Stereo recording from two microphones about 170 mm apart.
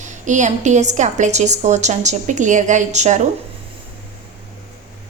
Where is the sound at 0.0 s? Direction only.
45° right (ahead or behind).